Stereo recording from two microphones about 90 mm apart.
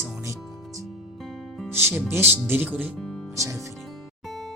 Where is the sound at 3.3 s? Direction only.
35° right (ahead or behind).